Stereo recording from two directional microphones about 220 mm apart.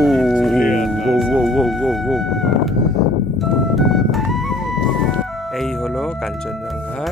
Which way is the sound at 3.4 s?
Centre (ahead or behind).